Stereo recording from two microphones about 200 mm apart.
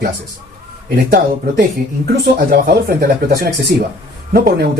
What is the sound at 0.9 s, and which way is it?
Speech, 50° right (ahead or behind).